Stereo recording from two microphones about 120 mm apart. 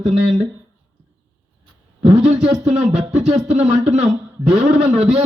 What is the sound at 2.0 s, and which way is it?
A man's voice, 65° right (ahead or behind).